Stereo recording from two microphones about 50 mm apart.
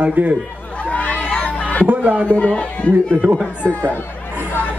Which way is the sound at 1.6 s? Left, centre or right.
Left.